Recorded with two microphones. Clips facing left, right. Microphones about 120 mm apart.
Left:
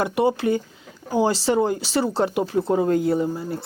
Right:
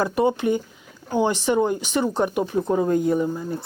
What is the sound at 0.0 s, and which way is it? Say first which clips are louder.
Speech: even; 25° left (ahead or behind).